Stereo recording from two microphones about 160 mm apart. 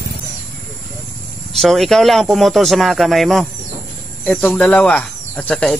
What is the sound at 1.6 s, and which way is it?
Speech, centre (ahead or behind).